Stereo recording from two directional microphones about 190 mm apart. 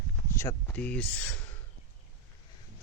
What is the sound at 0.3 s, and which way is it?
Speech, 10° left (ahead or behind).